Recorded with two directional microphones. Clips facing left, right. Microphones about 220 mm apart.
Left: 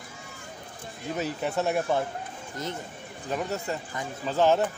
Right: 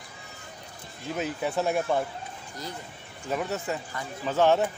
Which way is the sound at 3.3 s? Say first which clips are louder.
Right 1 dB; centre (ahead or behind).